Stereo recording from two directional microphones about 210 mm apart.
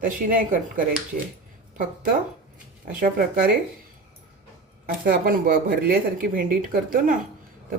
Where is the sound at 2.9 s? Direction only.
45° right (ahead or behind).